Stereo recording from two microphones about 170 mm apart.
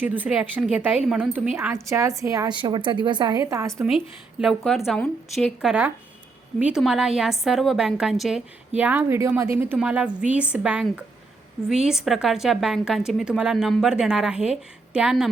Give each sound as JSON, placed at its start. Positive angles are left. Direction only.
{"t": 0.0, "sound": "a woman's voice", "side_deg": -10}
{"t": 3.8, "sound": "a woman's voice", "side_deg": 0}